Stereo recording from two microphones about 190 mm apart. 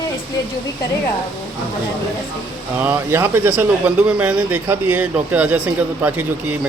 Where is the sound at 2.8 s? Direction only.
10° right (ahead or behind).